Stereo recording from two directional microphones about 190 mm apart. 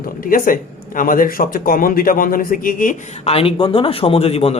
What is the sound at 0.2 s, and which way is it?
Speech, 50° left (ahead or behind).